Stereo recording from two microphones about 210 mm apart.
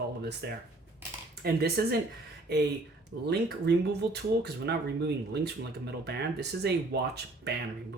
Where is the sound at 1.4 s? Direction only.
50° right (ahead or behind).